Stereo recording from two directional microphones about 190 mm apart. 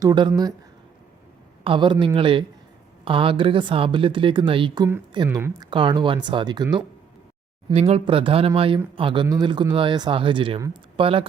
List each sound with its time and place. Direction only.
0.0 s speech: 25° right (ahead or behind)
1.6 s speech: 25° right (ahead or behind)